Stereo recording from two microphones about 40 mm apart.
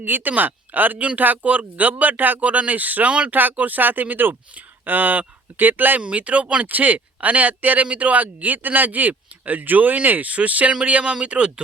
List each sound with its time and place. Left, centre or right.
0.0 s speech: right
2.4 s speech: right
3.1 s speech: right
3.5 s speech: right
6.1 s speech: right
6.7 s speech: right
10.8 s speech: right